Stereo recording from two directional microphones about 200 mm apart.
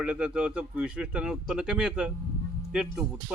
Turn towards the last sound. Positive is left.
turn(degrees=-5)  # may be behind; listen again after turning